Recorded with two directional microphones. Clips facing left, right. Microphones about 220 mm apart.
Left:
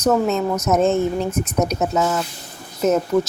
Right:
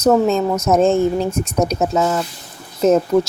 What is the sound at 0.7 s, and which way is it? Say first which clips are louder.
Speech: right 3 dB; 30° right (ahead or behind).